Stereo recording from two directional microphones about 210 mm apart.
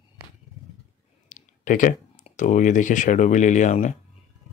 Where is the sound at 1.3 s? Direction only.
40° left (ahead or behind).